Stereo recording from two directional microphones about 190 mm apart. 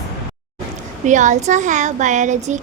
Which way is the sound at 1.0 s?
40° right (ahead or behind).